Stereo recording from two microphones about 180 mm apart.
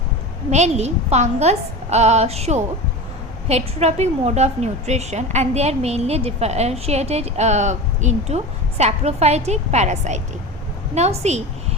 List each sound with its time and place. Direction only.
0.5 s a woman's voice: 40° right (ahead or behind)